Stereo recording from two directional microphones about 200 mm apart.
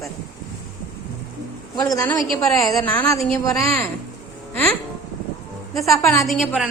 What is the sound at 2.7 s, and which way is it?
A woman's voice, 15° left (ahead or behind).